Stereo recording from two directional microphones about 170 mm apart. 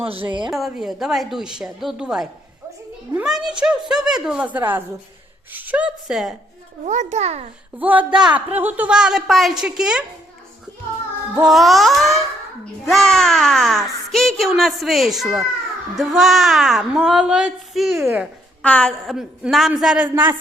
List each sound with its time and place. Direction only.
0.0 s a woman's voice: 35° right (ahead or behind)
0.5 s a child's voice: centre (ahead or behind)
6.8 s a child's voice: 45° right (ahead or behind)
7.8 s a child's voice: 10° right (ahead or behind)
11.3 s a child's voice: centre (ahead or behind)
18.0 s a woman's voice: 10° right (ahead or behind)
18.6 s a child's voice: 5° left (ahead or behind)